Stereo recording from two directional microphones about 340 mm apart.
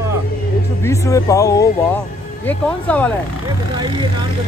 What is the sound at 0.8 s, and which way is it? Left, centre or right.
Speech, centre.